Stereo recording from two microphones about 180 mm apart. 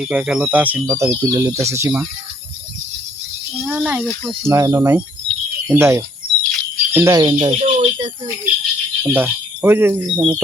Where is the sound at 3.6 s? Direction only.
10° right (ahead or behind).